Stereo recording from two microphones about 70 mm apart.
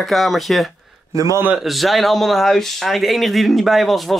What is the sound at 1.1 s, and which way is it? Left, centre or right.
Speech, right.